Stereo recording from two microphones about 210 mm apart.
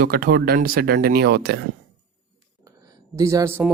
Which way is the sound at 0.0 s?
45° right (ahead or behind).